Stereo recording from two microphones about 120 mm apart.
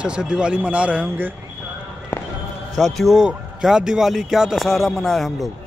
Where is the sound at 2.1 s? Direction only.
20° left (ahead or behind).